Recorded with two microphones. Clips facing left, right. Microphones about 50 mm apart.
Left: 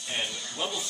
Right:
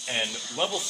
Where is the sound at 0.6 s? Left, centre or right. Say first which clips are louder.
Right 5 dB; right.